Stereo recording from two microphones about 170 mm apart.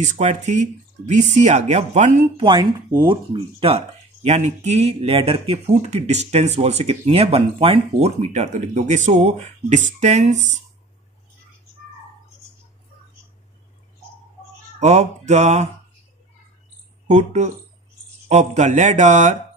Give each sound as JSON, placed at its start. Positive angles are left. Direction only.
{"t": 0.0, "sound": "speech", "side_deg": -45}
{"t": 2.4, "sound": "speech", "side_deg": -25}
{"t": 14.8, "sound": "speech", "side_deg": -40}
{"t": 17.1, "sound": "speech", "side_deg": -45}